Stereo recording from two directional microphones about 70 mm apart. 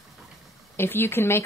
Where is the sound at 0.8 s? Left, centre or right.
Left.